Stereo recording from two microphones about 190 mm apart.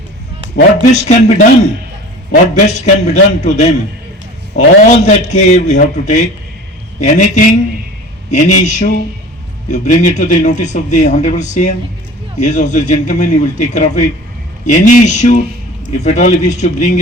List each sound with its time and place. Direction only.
0.5 s a man's voice: 35° left (ahead or behind)